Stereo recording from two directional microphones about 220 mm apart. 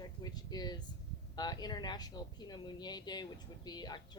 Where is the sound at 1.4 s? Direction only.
20° left (ahead or behind).